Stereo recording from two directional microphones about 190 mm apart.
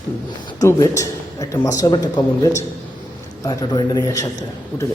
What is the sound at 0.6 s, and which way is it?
A man's voice, 15° left (ahead or behind).